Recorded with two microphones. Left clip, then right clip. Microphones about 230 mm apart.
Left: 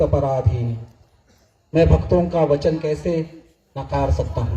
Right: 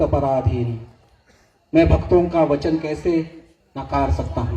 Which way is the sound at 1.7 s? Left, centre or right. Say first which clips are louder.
Right 1 dB; right.